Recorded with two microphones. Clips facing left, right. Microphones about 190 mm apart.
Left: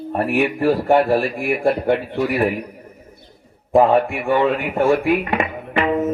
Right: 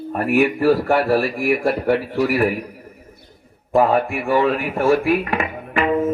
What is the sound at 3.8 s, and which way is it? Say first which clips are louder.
Speech: left 2 dB; 30° left (ahead or behind).